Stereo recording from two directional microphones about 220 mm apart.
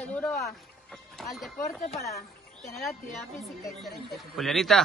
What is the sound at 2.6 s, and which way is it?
Speech, centre (ahead or behind).